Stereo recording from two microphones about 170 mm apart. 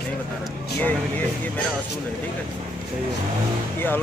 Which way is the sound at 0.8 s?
10° left (ahead or behind).